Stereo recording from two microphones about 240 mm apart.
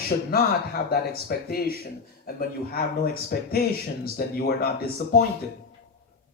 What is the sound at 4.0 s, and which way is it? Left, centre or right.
Speech, left.